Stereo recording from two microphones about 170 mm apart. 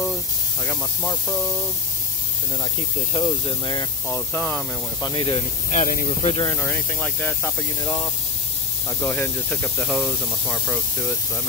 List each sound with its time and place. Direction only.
3.1 s speech: 30° left (ahead or behind)
4.1 s speech: 10° left (ahead or behind)
5.0 s speech: 30° left (ahead or behind)
5.7 s speech: 50° left (ahead or behind)
6.2 s speech: 30° left (ahead or behind)
6.5 s speech: 10° left (ahead or behind)
7.8 s speech: 20° left (ahead or behind); by 10.8 s centre (ahead or behind)